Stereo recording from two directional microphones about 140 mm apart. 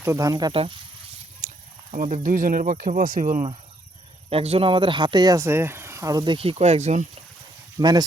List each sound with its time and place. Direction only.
0.0 s speech: 25° right (ahead or behind)
1.4 s a sound: 60° right (ahead or behind)
1.9 s speech: 55° right (ahead or behind); by 3.4 s 70° right (ahead or behind)
4.3 s speech: 45° right (ahead or behind)
7.8 s speech: 30° right (ahead or behind)